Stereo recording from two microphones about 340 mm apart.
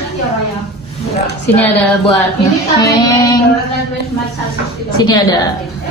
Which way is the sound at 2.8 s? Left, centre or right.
Centre.